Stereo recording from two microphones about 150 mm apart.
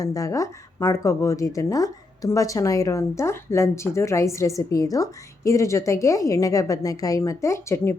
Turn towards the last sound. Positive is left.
turn(degrees=20)  # may be behind; listen again after turning